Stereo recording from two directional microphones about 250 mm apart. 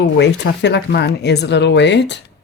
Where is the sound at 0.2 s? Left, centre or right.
Left.